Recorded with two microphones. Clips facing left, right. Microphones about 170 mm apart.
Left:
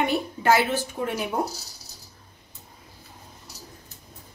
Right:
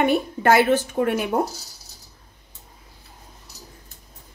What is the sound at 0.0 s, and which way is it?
A woman's voice, 55° right (ahead or behind).